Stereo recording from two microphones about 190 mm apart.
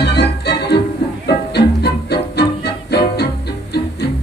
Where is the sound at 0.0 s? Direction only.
60° left (ahead or behind).